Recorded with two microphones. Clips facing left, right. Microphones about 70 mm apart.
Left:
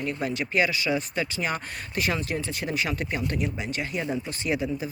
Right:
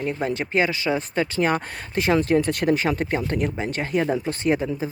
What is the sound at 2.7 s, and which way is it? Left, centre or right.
Speech, right.